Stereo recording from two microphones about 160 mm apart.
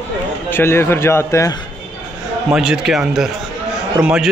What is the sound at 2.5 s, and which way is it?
A man's voice, 5° right (ahead or behind).